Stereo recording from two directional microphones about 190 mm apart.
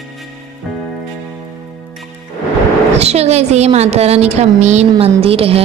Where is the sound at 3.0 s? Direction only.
35° right (ahead or behind).